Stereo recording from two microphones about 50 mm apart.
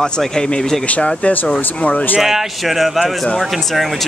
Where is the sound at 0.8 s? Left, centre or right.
Left.